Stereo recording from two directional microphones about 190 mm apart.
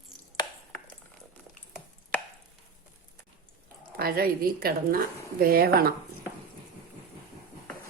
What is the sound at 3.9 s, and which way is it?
A woman's voice, 50° right (ahead or behind).